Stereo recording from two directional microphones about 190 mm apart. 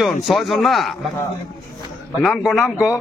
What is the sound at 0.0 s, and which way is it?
Speech, centre (ahead or behind).